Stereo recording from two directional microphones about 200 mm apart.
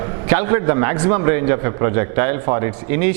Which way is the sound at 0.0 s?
15° right (ahead or behind).